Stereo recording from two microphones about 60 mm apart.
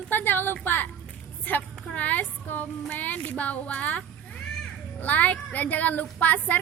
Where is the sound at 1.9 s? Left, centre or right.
Left.